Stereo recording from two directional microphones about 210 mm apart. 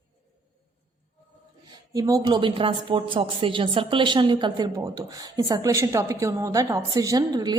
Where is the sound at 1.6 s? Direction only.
15° right (ahead or behind).